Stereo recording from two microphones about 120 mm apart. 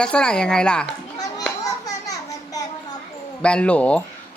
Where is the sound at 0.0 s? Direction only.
5° left (ahead or behind).